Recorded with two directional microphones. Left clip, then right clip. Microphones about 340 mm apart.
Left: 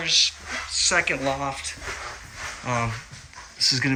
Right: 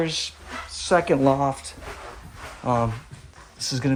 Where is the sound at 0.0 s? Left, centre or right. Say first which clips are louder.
Left 6 dB; centre.